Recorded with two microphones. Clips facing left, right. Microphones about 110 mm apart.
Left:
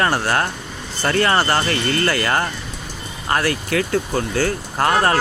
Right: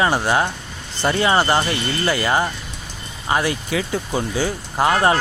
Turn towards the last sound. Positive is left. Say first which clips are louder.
# even
turn(degrees=-15)  # may be behind; listen again after turning